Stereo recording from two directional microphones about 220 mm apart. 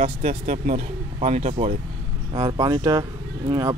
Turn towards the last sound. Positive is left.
turn(degrees=-20)  # may be behind; listen again after turning